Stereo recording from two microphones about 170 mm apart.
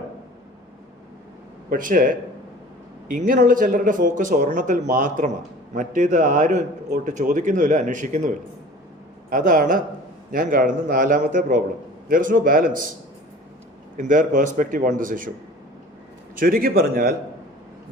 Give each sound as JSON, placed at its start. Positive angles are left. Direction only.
{"t": 1.7, "sound": "a man's voice", "side_deg": -50}
{"t": 13.9, "sound": "a man's voice", "side_deg": -50}
{"t": 16.3, "sound": "a man's voice", "side_deg": -55}